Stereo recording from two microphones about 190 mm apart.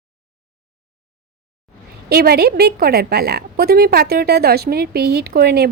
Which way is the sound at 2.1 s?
55° right (ahead or behind).